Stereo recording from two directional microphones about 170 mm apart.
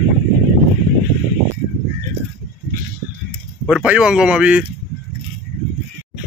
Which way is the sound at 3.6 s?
5° right (ahead or behind).